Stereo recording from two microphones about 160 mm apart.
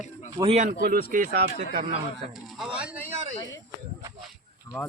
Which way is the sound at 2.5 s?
5° right (ahead or behind).